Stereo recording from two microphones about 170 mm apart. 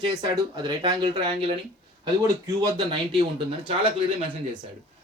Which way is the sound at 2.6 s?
25° right (ahead or behind).